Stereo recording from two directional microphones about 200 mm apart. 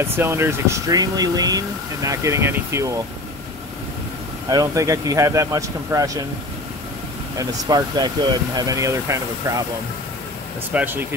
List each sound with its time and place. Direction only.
0.0 s speech: 10° right (ahead or behind)
4.5 s speech: 15° right (ahead or behind)
7.3 s speech: 20° right (ahead or behind)
10.7 s speech: 5° right (ahead or behind)